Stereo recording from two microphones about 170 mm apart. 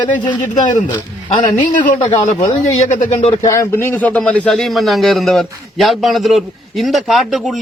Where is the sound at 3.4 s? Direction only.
20° left (ahead or behind).